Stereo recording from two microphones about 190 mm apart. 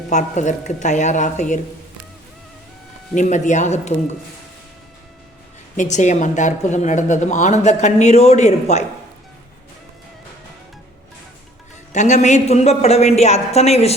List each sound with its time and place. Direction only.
0.1 s speech: 40° left (ahead or behind)
3.2 s speech: 40° left (ahead or behind)
5.7 s speech: 40° left (ahead or behind)
11.9 s speech: 40° left (ahead or behind)